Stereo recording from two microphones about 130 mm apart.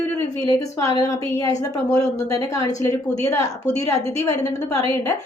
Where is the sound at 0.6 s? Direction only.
25° left (ahead or behind).